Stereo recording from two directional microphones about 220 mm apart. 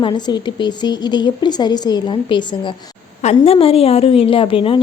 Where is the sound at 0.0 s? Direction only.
20° left (ahead or behind).